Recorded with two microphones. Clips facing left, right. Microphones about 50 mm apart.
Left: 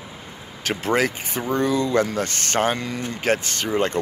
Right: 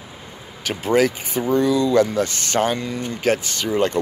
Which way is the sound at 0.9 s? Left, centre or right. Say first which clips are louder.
Right 7 dB; left.